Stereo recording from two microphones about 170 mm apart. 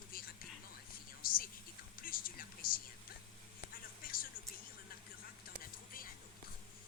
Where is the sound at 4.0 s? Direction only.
55° left (ahead or behind).